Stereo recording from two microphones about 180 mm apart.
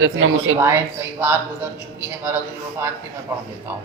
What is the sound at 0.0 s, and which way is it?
Speech, 90° right.